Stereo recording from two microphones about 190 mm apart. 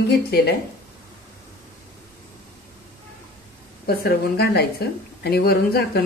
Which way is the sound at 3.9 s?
55° left (ahead or behind).